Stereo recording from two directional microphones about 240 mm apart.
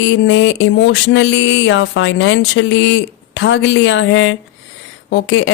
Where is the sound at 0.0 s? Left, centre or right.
Left.